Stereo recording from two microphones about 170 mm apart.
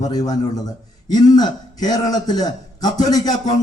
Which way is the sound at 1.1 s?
25° left (ahead or behind).